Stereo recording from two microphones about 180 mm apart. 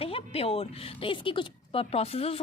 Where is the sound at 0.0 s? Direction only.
30° left (ahead or behind).